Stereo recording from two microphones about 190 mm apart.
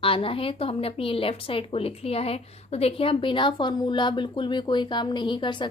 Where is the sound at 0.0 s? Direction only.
30° left (ahead or behind).